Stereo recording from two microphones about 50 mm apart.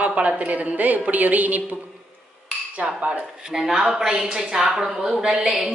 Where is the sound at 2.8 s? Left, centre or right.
Centre.